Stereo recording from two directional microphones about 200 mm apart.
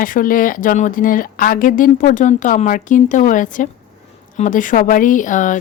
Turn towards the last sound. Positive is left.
turn(degrees=40)  # may be behind; listen again after turning